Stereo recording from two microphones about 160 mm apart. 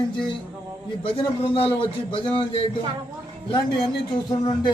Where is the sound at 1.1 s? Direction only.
35° left (ahead or behind).